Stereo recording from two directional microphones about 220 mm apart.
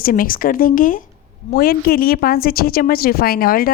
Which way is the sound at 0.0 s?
40° left (ahead or behind).